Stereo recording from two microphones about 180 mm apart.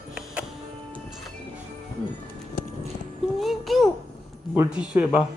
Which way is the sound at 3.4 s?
Centre (ahead or behind).